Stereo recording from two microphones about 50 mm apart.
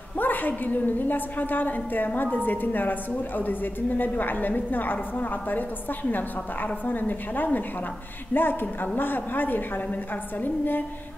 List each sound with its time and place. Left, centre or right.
0.2 s a woman's voice: left